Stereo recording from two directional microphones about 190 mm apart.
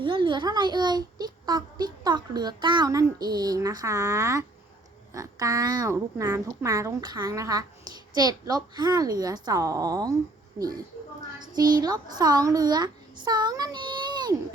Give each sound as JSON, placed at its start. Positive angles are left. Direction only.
{"t": 0.0, "sound": "speech", "side_deg": -25}
{"t": 11.3, "sound": "a child's voice", "side_deg": -20}